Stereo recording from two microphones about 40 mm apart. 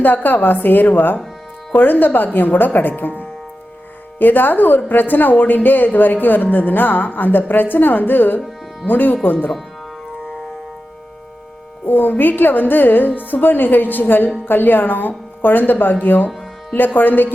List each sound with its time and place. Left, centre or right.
0.0 s a woman's voice: left
11.9 s a woman's voice: left